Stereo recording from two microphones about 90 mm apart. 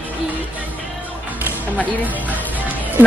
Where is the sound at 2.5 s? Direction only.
20° right (ahead or behind).